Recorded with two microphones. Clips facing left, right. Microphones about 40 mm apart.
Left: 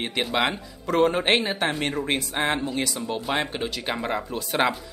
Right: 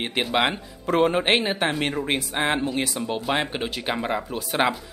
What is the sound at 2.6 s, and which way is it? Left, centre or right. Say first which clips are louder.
Speech: right 2 dB; right.